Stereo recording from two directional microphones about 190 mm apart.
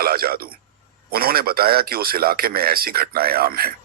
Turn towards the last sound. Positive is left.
turn(degrees=-50)  # may be behind; listen again after turning